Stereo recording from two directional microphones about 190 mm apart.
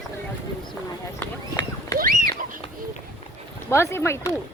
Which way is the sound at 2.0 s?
45° right (ahead or behind).